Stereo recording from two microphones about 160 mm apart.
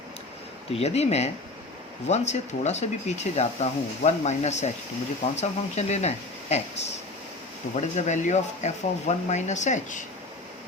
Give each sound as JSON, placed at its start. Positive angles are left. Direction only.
{"t": 0.7, "sound": "speech", "side_deg": 40}
{"t": 7.8, "sound": "speech", "side_deg": 45}